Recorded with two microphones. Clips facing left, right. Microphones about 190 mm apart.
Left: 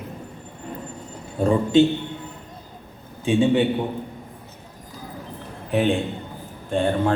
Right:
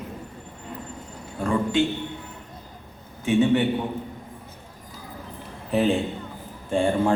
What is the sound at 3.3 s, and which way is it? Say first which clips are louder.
Speech: left 1 dB; 20° left (ahead or behind).